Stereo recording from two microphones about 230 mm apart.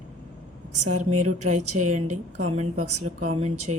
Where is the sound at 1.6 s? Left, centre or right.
Right.